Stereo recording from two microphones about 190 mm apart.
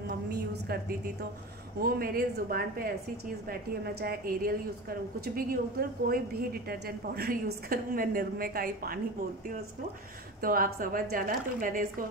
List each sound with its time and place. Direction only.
0.3 s a sound: 55° right (ahead or behind)
1.8 s a woman's voice: 50° right (ahead or behind)
10.4 s a woman's voice: 50° right (ahead or behind)